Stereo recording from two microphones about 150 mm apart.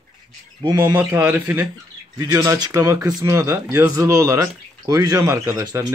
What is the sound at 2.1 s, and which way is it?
Speech, 25° right (ahead or behind).